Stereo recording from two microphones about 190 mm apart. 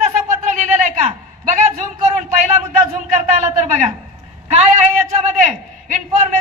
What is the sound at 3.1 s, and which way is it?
Speech, 40° right (ahead or behind).